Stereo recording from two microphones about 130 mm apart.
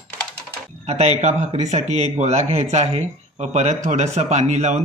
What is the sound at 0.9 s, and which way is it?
Speech, 55° right (ahead or behind).